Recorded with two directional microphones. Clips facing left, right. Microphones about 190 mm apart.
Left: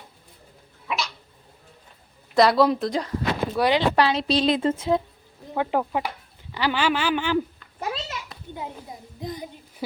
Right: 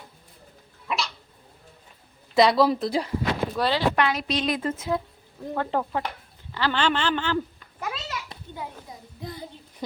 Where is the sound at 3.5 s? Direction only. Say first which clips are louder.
Left 7 dB; 15° left (ahead or behind).